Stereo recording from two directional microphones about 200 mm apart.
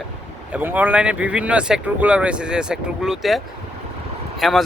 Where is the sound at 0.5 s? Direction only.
10° right (ahead or behind).